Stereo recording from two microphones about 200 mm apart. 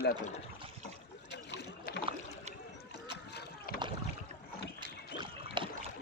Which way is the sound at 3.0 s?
55° left (ahead or behind).